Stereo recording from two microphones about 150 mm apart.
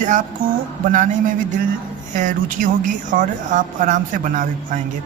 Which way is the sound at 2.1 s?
60° right (ahead or behind).